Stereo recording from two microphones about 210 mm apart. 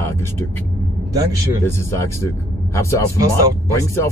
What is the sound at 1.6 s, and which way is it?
Speech, 10° left (ahead or behind).